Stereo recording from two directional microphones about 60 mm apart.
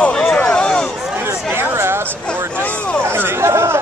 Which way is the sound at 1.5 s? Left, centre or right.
Right.